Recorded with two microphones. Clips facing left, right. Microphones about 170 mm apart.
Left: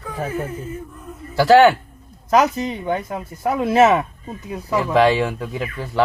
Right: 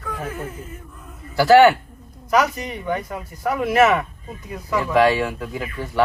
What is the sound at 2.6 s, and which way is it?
Speech, 25° left (ahead or behind).